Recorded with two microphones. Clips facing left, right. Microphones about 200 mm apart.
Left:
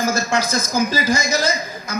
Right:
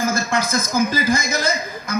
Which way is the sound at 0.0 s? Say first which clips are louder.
Left 1 dB; 55° right (ahead or behind).